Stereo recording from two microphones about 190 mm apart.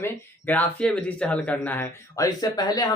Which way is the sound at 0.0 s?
10° left (ahead or behind).